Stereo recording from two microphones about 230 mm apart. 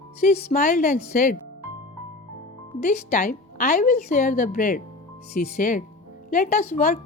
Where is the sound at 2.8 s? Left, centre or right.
Left.